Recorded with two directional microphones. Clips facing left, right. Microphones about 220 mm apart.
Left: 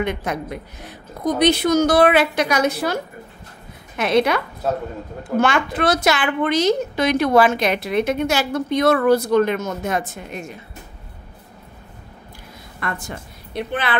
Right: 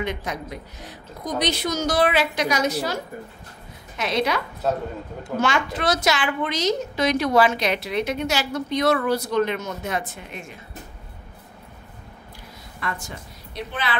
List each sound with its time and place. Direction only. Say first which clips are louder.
0.0 s a woman's voice: left 5 dB; 55° left (ahead or behind)
5.4 s speech: left 4 dB; 55° left (ahead or behind)
12.8 s a woman's voice: left 3 dB; 55° left (ahead or behind)